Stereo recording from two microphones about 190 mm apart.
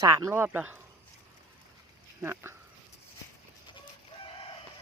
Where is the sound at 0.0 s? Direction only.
15° right (ahead or behind).